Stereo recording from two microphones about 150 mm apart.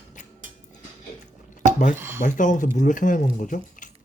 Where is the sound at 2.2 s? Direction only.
60° left (ahead or behind).